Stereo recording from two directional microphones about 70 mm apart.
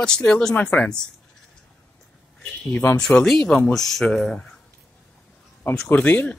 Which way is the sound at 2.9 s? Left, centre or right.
Centre.